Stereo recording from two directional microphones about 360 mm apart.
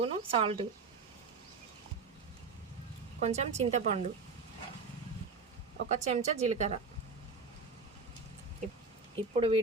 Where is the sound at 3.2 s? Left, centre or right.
Centre.